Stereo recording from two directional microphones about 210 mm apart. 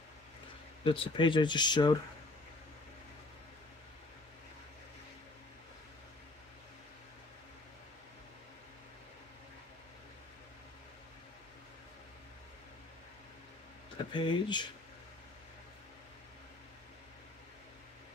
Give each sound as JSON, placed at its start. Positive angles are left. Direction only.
{"t": 0.8, "sound": "speech", "side_deg": 25}
{"t": 14.1, "sound": "speech", "side_deg": 20}